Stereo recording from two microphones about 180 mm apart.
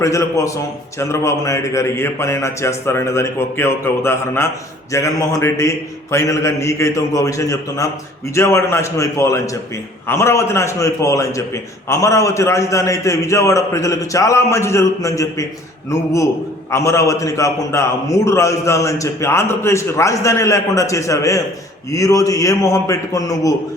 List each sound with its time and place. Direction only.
0.0 s a man's voice: 15° left (ahead or behind)